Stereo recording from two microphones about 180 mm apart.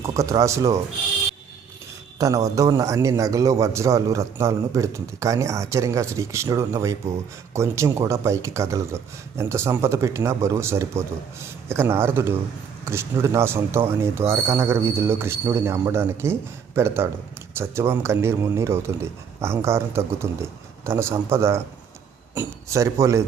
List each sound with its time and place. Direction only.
0.0 s speech: 15° right (ahead or behind)
2.1 s a man's voice: 20° right (ahead or behind)